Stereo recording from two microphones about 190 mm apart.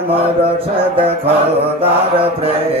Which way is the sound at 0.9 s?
30° right (ahead or behind).